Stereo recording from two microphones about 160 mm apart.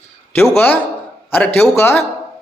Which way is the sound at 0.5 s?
10° left (ahead or behind).